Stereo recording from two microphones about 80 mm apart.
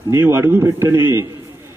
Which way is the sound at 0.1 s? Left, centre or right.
Right.